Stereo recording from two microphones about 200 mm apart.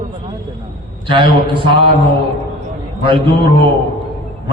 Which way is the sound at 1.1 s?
25° right (ahead or behind).